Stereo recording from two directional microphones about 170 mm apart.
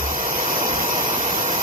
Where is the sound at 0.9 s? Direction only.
30° right (ahead or behind).